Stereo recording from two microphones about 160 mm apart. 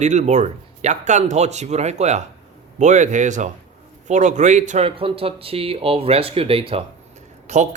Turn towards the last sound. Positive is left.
turn(degrees=-45)  # may be behind; listen again after turning